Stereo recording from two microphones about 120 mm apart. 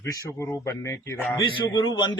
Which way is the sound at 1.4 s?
40° left (ahead or behind).